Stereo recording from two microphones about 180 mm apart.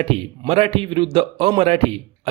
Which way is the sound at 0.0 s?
35° right (ahead or behind).